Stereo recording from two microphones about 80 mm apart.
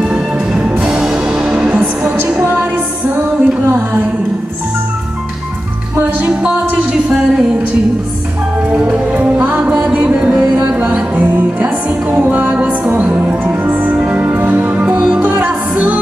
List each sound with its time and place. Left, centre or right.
0.0 s music: centre; by 4.1 s right
5.9 s music: right
8.7 s music: centre